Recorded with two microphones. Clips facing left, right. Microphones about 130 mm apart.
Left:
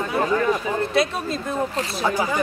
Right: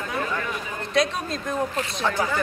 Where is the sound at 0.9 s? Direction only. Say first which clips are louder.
Right 3 dB; 5° left (ahead or behind).